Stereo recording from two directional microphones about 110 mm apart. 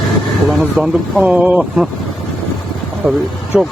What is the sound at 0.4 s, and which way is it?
Speech, centre (ahead or behind).